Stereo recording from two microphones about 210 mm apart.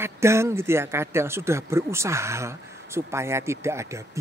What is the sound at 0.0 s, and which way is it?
Speech, 10° right (ahead or behind).